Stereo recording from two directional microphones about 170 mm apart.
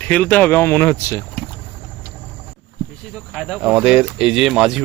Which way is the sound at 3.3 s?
Centre (ahead or behind).